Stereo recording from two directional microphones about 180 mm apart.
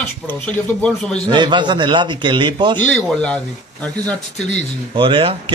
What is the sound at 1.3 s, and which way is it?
A man's voice, 25° right (ahead or behind).